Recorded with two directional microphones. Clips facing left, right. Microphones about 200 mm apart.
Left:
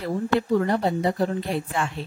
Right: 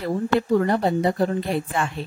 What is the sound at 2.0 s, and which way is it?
Speech, 55° right (ahead or behind).